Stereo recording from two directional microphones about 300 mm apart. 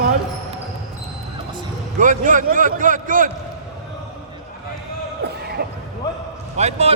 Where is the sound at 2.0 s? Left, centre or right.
Right.